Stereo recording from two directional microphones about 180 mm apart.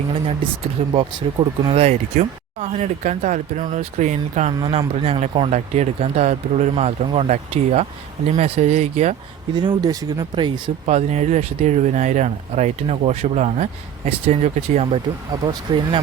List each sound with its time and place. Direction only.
0.1 s speech: 30° right (ahead or behind)
4.6 s speech: 30° right (ahead or behind)
9.6 s speech: 25° right (ahead or behind)
10.8 s speech: 40° right (ahead or behind)
15.3 s speech: 25° right (ahead or behind)